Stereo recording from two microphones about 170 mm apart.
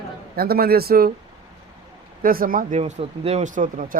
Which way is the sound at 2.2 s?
55° right (ahead or behind).